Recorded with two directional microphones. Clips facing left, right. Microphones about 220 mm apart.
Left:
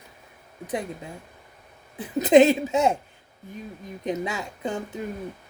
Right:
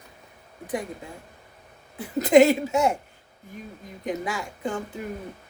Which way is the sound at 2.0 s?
20° left (ahead or behind).